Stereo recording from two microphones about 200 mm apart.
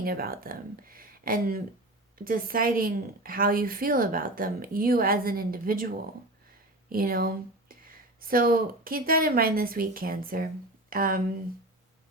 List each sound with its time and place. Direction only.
0.0 s a woman's voice: 50° right (ahead or behind)
6.9 s speech: 45° right (ahead or behind)